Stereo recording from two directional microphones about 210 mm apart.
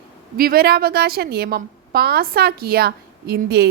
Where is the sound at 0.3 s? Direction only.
45° right (ahead or behind).